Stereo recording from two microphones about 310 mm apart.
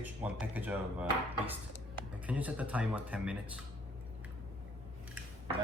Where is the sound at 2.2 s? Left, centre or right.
Centre.